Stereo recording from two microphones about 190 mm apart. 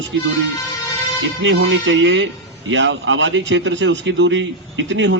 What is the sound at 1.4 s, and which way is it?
A man's voice, 70° right (ahead or behind).